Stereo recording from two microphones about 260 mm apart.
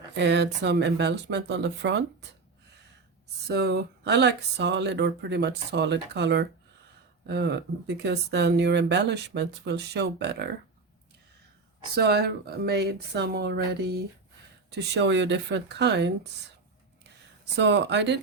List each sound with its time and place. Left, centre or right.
0.2 s speech: right
3.4 s speech: right
11.9 s speech: right
17.6 s speech: right